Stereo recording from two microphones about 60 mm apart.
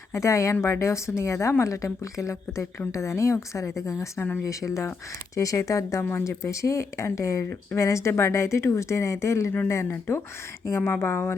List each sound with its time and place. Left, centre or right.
0.1 s a woman's voice: left
10.7 s speech: left